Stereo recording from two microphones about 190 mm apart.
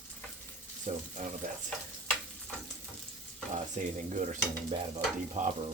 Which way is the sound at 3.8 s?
40° right (ahead or behind).